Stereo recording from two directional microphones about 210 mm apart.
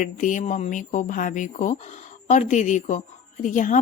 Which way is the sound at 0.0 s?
40° left (ahead or behind).